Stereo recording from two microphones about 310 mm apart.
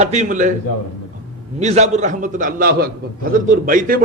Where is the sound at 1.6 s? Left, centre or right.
Right.